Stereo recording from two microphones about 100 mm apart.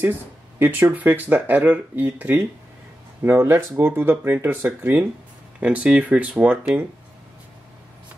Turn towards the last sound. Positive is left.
turn(degrees=-15)  # may be behind; listen again after turning